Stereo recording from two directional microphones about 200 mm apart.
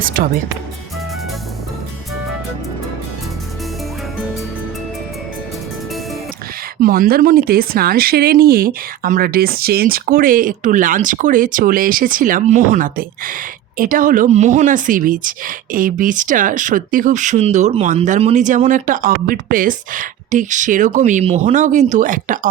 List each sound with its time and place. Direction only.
0.0 s speech: 45° right (ahead or behind)
6.8 s speech: 45° right (ahead or behind)